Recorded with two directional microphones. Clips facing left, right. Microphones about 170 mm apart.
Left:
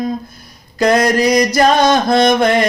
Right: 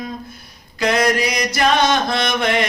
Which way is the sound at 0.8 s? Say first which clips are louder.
Left 5 dB; 40° left (ahead or behind).